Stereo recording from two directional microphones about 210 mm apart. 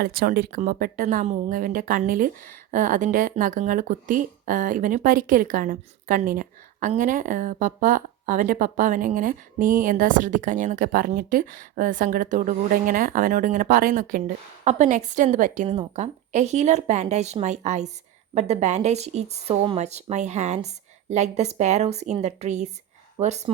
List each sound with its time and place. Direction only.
0.0 s speech: 45° right (ahead or behind)